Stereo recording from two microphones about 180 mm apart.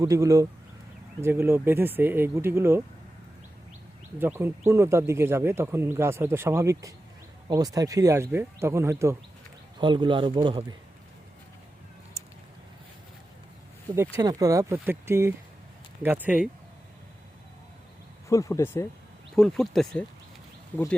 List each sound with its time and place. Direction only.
0.0 s speech: 20° right (ahead or behind)
4.2 s speech: 10° right (ahead or behind)
9.8 s speech: 25° right (ahead or behind)
14.2 s speech: 20° right (ahead or behind)
18.3 s speech: 15° left (ahead or behind)
19.4 s speech: centre (ahead or behind)